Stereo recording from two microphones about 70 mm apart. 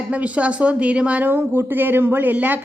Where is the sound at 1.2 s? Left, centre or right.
Right.